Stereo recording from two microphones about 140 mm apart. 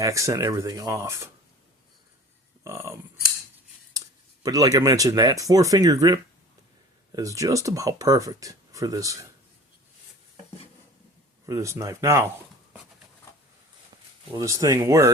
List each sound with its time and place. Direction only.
0.0 s speech: 20° right (ahead or behind)
2.6 s speech: 20° right (ahead or behind)
4.4 s speech: 25° right (ahead or behind)
11.4 s speech: 20° right (ahead or behind)
14.3 s speech: 25° right (ahead or behind)